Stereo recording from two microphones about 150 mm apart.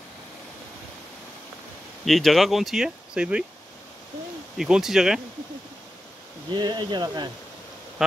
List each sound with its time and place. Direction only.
2.0 s speech: centre (ahead or behind)
4.6 s speech: 5° right (ahead or behind)
6.5 s speech: 30° right (ahead or behind)